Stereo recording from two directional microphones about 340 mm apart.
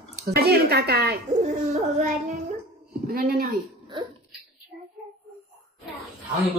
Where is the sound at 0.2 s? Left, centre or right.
Right.